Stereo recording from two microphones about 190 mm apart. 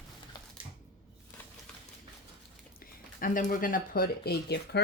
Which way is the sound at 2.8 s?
45° left (ahead or behind).